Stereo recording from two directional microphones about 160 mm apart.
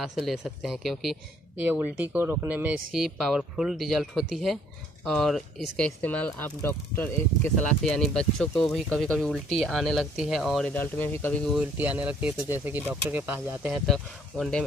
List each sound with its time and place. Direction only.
0.0 s speech: centre (ahead or behind)
1.7 s speech: 10° right (ahead or behind)
10.7 s speech: 10° left (ahead or behind)
11.7 s speech: 10° right (ahead or behind)
13.8 s speech: 5° left (ahead or behind)